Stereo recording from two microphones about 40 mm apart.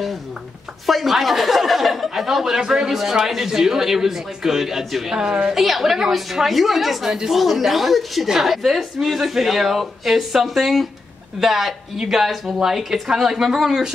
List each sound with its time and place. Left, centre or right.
0.8 s speech: centre
5.1 s a woman's voice: right
5.5 s speech: centre